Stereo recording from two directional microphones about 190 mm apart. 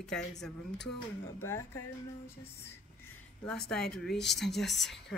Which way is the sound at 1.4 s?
15° left (ahead or behind).